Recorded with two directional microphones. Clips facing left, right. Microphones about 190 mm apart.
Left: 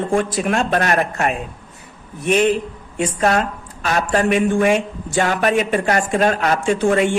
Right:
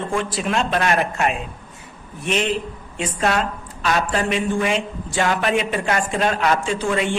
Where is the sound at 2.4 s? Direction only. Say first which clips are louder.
Left 6 dB; 50° left (ahead or behind).